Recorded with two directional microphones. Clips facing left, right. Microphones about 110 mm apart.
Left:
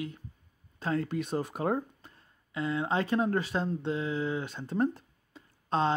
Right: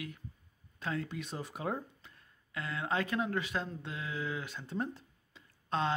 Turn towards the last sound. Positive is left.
turn(degrees=35)  # may be behind; listen again after turning